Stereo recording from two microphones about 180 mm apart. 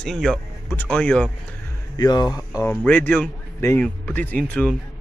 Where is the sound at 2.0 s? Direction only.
20° left (ahead or behind).